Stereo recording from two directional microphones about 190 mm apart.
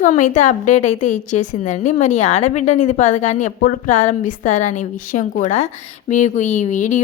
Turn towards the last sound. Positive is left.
turn(degrees=40)  # may be behind; listen again after turning